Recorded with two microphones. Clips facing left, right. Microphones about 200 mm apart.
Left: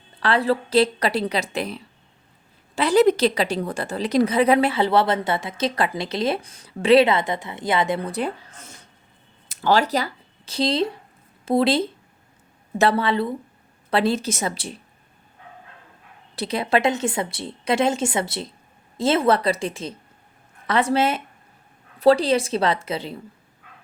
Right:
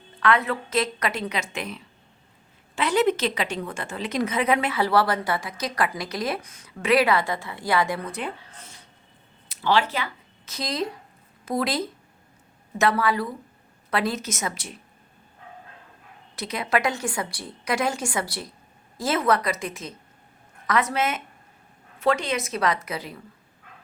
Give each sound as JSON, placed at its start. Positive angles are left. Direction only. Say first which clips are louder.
{"t": 0.2, "sound": "a woman's voice", "louder": "left 3 dB", "side_deg": 30}
{"t": 16.3, "sound": "a woman's voice", "louder": "left 4 dB", "side_deg": 30}